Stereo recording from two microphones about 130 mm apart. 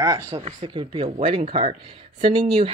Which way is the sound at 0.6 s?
40° right (ahead or behind).